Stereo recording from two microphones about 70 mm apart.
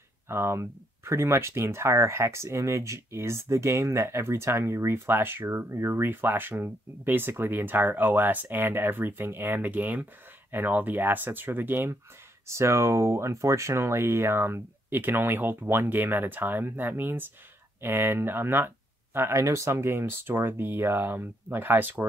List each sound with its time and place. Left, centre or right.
0.3 s speech: right
12.4 s speech: right